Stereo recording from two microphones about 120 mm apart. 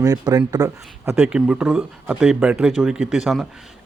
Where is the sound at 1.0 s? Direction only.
15° right (ahead or behind).